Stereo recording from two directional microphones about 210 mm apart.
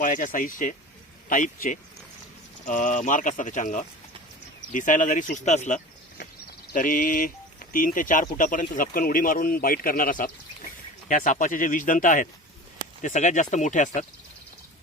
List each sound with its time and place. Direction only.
0.0 s speech: 40° left (ahead or behind)